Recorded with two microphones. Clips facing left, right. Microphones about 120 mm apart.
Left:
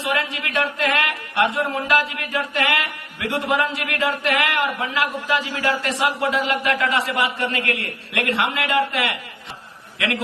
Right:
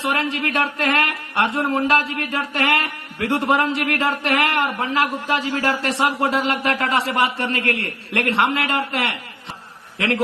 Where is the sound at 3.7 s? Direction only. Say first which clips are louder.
Right 5 dB; 45° right (ahead or behind).